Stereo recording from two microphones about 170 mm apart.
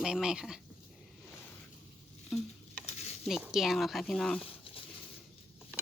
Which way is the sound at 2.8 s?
40° left (ahead or behind).